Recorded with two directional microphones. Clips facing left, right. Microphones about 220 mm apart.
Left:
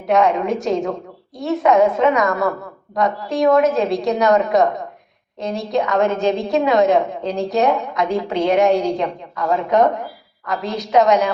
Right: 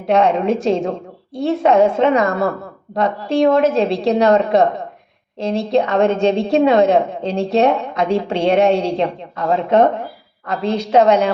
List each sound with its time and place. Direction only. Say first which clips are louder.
0.1 s a woman's voice: right 2 dB; 30° right (ahead or behind)